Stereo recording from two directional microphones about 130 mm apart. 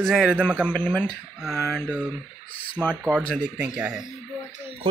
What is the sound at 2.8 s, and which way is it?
Speech, 5° left (ahead or behind).